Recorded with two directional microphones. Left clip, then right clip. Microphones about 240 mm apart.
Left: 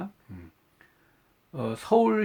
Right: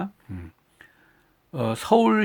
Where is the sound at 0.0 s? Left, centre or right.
Right.